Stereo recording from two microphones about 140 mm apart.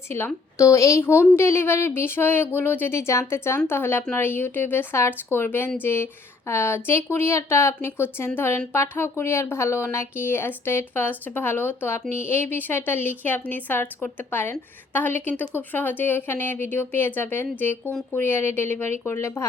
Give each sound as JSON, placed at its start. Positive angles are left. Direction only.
{"t": 0.6, "sound": "a woman's voice", "side_deg": 20}